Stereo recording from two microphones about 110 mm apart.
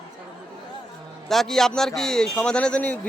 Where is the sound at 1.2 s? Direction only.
5° left (ahead or behind).